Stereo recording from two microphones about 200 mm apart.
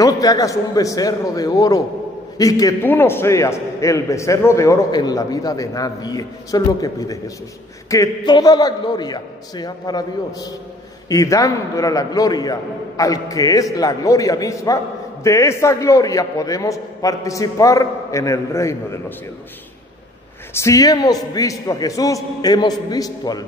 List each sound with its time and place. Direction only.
0.0 s a man's voice: 15° left (ahead or behind)
20.5 s a man's voice: 15° left (ahead or behind)